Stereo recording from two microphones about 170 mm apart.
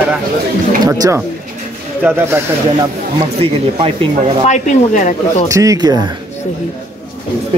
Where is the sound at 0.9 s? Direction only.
15° right (ahead or behind).